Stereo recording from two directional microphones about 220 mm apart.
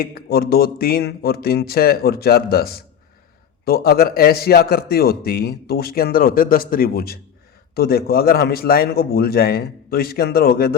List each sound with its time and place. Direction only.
0.0 s a man's voice: 45° left (ahead or behind)